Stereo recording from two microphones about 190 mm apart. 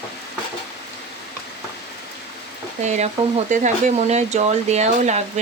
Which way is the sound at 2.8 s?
35° right (ahead or behind).